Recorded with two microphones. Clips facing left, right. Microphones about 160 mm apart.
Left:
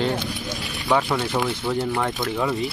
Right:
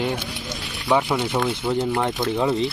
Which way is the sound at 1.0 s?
15° right (ahead or behind).